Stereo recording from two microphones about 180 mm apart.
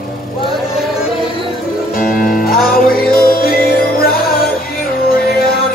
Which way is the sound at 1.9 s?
55° left (ahead or behind).